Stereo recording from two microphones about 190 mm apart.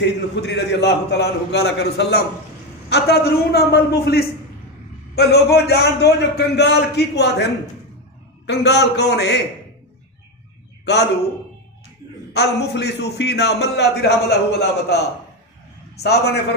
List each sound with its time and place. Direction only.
0.0 s a man's voice: 65° left (ahead or behind)
12.3 s a man's voice: 60° left (ahead or behind)
16.0 s a man's voice: 60° left (ahead or behind)